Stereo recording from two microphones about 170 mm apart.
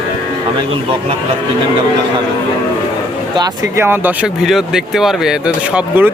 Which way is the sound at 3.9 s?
10° right (ahead or behind).